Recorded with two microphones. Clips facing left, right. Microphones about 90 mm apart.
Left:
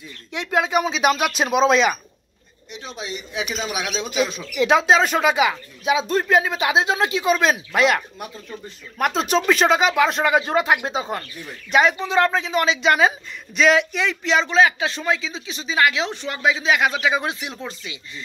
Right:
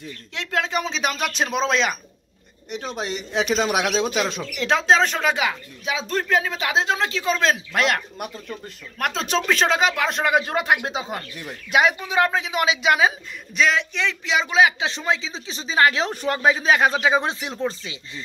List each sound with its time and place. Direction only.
0.3 s speech: 15° left (ahead or behind)
2.7 s speech: 60° right (ahead or behind)
4.6 s speech: 10° left (ahead or behind)
10.9 s speech: 5° right (ahead or behind)
14.8 s speech: 20° right (ahead or behind)